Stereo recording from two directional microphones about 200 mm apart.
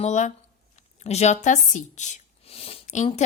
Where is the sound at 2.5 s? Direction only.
30° left (ahead or behind).